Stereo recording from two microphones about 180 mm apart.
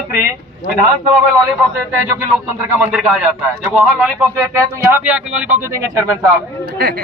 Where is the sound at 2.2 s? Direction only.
10° right (ahead or behind).